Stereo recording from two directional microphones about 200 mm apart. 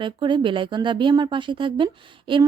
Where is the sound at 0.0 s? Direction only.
25° right (ahead or behind).